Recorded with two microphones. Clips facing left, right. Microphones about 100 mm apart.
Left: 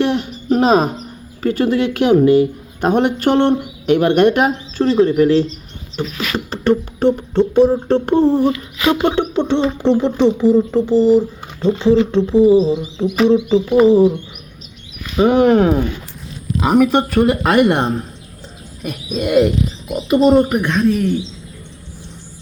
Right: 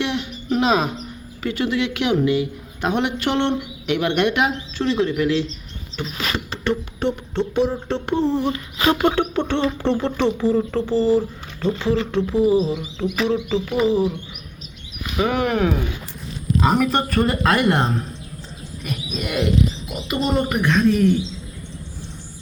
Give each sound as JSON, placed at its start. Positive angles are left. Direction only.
{"t": 0.0, "sound": "a sound", "side_deg": 40}
{"t": 1.4, "sound": "speech", "side_deg": 40}
{"t": 6.3, "sound": "beatboxing", "side_deg": 40}
{"t": 7.9, "sound": "a sound", "side_deg": 45}
{"t": 8.5, "sound": "speech", "side_deg": -35}
{"t": 9.0, "sound": "speech", "side_deg": 20}
{"t": 15.1, "sound": "speech", "side_deg": 30}
{"t": 16.6, "sound": "speech", "side_deg": 10}
{"t": 19.2, "sound": "speech", "side_deg": 20}